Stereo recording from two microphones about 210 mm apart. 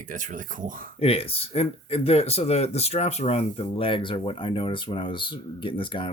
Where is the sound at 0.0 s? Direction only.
40° right (ahead or behind).